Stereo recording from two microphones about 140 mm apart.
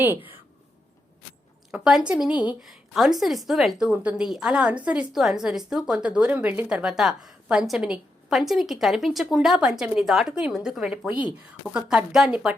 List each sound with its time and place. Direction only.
1.7 s a woman's voice: 5° right (ahead or behind)
11.1 s speech: 35° left (ahead or behind)
11.7 s a woman's voice: 5° right (ahead or behind)